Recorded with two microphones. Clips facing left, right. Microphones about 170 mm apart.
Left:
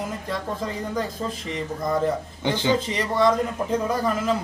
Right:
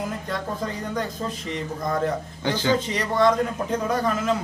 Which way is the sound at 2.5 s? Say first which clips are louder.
Left 1 dB; 20° left (ahead or behind).